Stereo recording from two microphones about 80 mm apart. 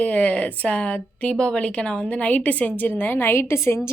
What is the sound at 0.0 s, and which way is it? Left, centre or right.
A woman's voice, centre.